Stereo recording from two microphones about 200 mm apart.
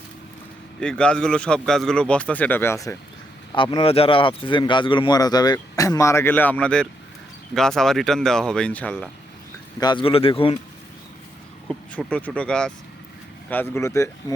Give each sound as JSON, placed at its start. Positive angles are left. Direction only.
{"t": 0.8, "sound": "a man's voice", "side_deg": 5}
{"t": 3.5, "sound": "a man's voice", "side_deg": 25}
{"t": 9.8, "sound": "speech", "side_deg": 25}
{"t": 11.7, "sound": "a man's voice", "side_deg": 5}